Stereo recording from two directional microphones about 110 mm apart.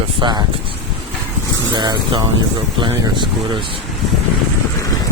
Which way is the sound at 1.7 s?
40° right (ahead or behind).